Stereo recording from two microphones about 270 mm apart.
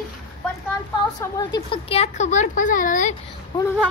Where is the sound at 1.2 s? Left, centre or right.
Centre.